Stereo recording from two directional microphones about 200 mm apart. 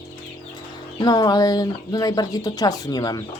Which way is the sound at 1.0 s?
20° left (ahead or behind).